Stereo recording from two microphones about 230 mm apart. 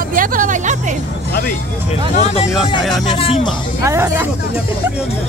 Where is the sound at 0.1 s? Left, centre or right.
Right.